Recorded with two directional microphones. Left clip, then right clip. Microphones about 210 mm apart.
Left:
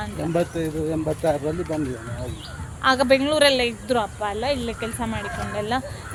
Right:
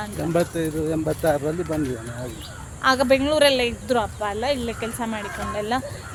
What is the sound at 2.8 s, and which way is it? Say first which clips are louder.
Speech: even; 5° left (ahead or behind).